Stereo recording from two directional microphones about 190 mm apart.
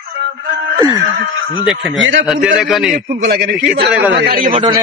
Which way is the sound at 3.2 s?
60° right (ahead or behind).